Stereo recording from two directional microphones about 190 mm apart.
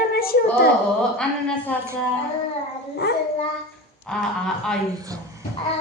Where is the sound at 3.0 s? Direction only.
55° left (ahead or behind).